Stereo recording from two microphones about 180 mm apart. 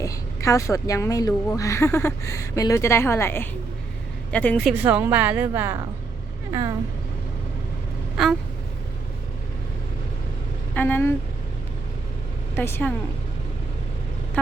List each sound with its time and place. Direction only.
0.0 s a woman's voice: 15° left (ahead or behind)
4.6 s a woman's voice: 10° right (ahead or behind)
8.1 s a sound: centre (ahead or behind)
10.8 s speech: 10° left (ahead or behind)
12.5 s a woman's voice: 10° left (ahead or behind)